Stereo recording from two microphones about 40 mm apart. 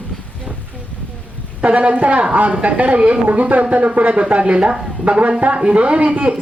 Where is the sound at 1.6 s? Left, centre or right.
Right.